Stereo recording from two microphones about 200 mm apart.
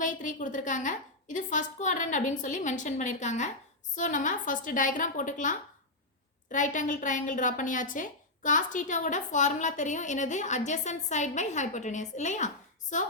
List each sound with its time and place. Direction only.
0.0 s a woman's voice: 40° left (ahead or behind)